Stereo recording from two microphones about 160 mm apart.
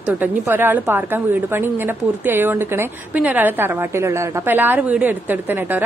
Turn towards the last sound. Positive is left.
turn(degrees=-10)  # may be behind; listen again after turning